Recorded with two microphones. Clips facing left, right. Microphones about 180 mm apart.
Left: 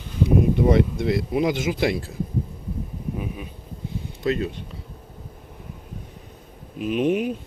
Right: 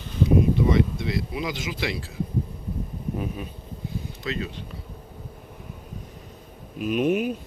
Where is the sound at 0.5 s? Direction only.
55° left (ahead or behind).